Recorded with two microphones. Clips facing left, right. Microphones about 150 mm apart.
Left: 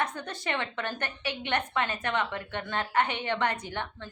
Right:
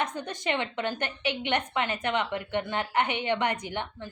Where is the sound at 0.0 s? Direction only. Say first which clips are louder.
Right 2 dB; 15° right (ahead or behind).